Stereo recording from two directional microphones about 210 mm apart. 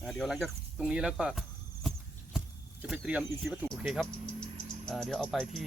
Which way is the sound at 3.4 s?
10° right (ahead or behind).